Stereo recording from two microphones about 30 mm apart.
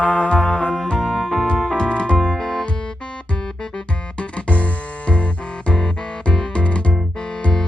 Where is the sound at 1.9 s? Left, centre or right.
Left.